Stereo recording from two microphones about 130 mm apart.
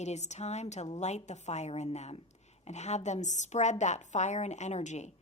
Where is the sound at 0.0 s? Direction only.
60° left (ahead or behind).